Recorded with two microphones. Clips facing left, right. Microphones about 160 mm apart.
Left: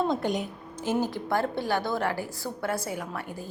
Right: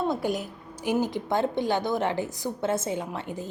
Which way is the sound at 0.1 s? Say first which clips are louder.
Even; 5° right (ahead or behind).